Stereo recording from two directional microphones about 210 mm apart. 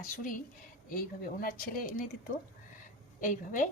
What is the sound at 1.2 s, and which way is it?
Speech, 45° left (ahead or behind).